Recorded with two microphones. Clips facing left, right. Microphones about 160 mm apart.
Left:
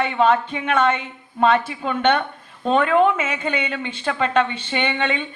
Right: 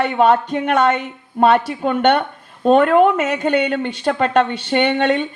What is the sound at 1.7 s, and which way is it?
Speech, 50° right (ahead or behind).